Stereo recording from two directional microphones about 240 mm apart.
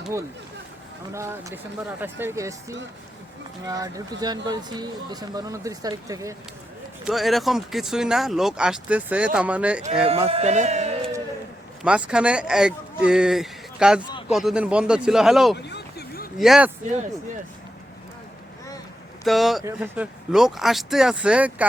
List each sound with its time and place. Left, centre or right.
1.1 s speech: centre
7.0 s speech: centre
10.1 s a man's voice: right
11.8 s speech: centre
15.5 s a sound: left
16.4 s speech: centre
19.2 s speech: centre